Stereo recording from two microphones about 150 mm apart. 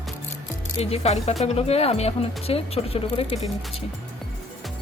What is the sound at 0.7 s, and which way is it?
Speech, 45° left (ahead or behind).